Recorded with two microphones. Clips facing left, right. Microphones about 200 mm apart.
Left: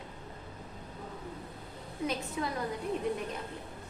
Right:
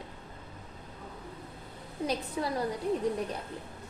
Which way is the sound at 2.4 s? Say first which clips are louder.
Right 2 dB; 35° right (ahead or behind).